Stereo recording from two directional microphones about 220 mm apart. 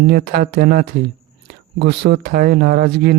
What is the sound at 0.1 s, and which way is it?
Speech, 45° right (ahead or behind).